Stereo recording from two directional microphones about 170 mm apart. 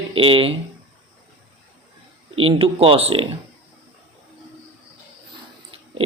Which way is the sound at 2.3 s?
35° right (ahead or behind).